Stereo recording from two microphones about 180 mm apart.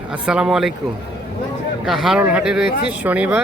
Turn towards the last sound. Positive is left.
turn(degrees=-10)  # may be behind; listen again after turning